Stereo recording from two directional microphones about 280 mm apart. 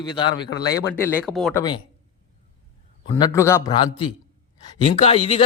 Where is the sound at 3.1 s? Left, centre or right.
Centre.